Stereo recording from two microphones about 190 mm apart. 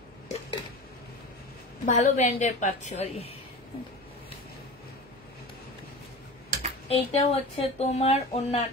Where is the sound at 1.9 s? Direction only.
35° left (ahead or behind).